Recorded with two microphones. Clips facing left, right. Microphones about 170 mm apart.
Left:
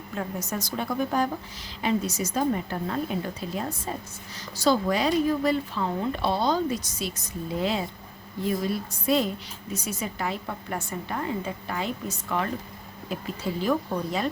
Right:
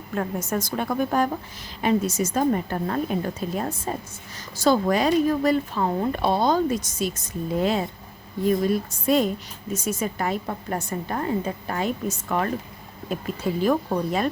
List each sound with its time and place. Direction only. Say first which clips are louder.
0.1 s speech: right 5 dB; 50° right (ahead or behind)